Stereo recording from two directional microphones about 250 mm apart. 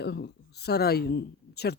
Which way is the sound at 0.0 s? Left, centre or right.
Left.